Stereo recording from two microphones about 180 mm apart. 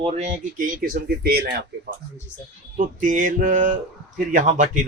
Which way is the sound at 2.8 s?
45° right (ahead or behind).